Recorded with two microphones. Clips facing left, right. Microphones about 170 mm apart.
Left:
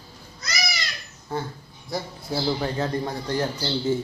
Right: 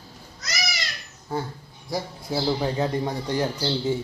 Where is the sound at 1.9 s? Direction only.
15° right (ahead or behind).